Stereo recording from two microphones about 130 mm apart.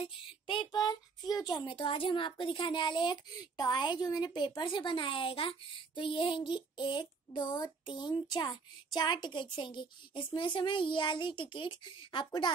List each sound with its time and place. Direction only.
0.0 s speech: 40° left (ahead or behind)